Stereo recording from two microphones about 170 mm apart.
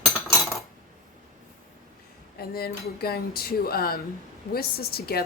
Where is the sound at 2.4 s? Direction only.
65° left (ahead or behind).